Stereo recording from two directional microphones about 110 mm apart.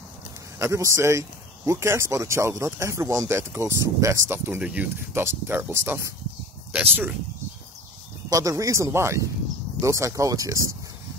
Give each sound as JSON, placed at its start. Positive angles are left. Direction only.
{"t": 0.6, "sound": "speech", "side_deg": -25}
{"t": 4.6, "sound": "speech", "side_deg": -15}
{"t": 6.7, "sound": "speech", "side_deg": -15}
{"t": 8.3, "sound": "speech", "side_deg": -30}